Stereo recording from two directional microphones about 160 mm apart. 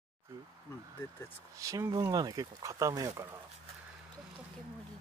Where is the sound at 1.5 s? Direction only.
20° right (ahead or behind).